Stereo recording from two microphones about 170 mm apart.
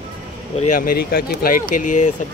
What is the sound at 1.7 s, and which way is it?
Speech, 50° left (ahead or behind).